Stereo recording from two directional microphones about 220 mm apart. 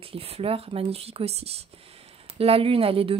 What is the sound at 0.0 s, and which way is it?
Speech, 25° right (ahead or behind).